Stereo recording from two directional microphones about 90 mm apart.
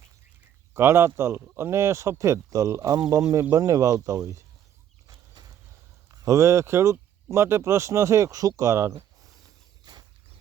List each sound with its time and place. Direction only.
0.7 s speech: 30° right (ahead or behind)
5.0 s a sound: 45° right (ahead or behind)
6.2 s speech: 35° right (ahead or behind)